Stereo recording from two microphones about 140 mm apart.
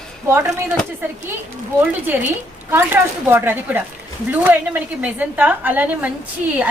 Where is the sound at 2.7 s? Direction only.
15° right (ahead or behind).